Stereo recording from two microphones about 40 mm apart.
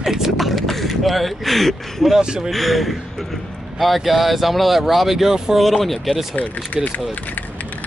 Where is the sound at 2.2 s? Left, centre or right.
Centre.